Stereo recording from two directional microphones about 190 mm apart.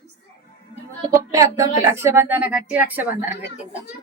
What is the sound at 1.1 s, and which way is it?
Speech, 15° right (ahead or behind).